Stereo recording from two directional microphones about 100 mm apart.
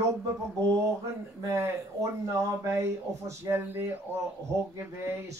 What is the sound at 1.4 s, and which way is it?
Speech, 30° right (ahead or behind).